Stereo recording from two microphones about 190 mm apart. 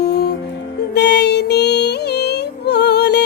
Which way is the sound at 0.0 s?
60° left (ahead or behind).